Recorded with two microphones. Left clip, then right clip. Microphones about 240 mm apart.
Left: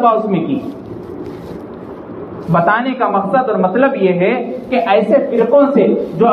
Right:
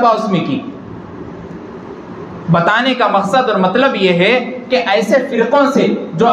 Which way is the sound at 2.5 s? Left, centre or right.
Right.